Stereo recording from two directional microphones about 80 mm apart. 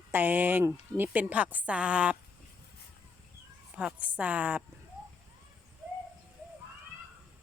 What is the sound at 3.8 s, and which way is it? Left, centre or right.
Speech, centre.